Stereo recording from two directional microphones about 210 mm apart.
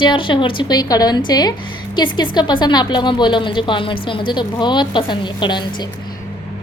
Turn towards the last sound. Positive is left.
turn(degrees=20)  # may be behind; listen again after turning